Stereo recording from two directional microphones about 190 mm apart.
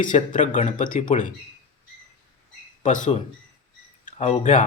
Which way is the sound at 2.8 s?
40° left (ahead or behind).